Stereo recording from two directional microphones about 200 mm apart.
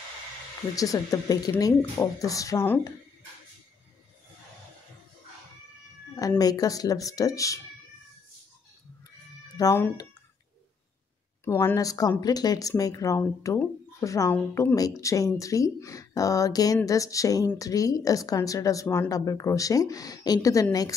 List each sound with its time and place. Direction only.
0.7 s speech: 15° left (ahead or behind)
6.1 s speech: 20° left (ahead or behind)
9.6 s speech: 15° left (ahead or behind)
11.4 s speech: 10° left (ahead or behind)